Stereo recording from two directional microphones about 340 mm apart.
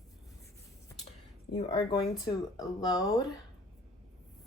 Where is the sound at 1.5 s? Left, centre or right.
Centre.